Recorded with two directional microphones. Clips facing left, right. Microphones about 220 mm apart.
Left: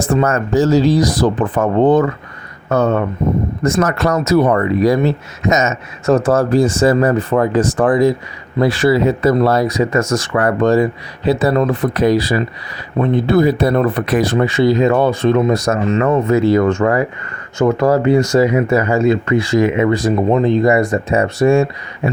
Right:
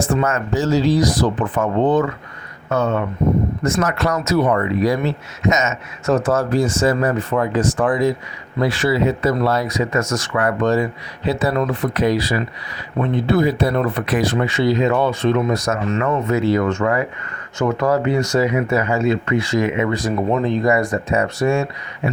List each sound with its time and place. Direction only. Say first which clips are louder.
0.0 s speech: left 4 dB; 40° left (ahead or behind)